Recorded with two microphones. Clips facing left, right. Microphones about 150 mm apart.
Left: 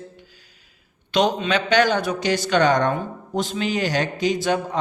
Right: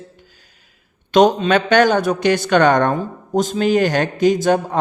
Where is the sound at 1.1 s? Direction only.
45° right (ahead or behind).